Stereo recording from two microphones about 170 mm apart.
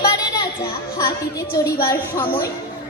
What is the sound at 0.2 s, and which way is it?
Children playing, 25° left (ahead or behind).